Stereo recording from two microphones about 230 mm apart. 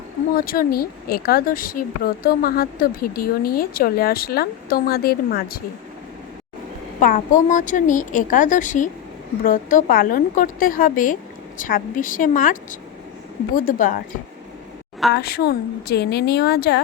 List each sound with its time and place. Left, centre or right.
0.3 s speech: left
7.0 s speech: left
13.6 s a woman's voice: left